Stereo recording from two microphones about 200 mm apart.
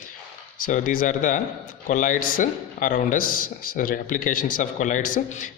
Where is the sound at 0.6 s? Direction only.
45° left (ahead or behind).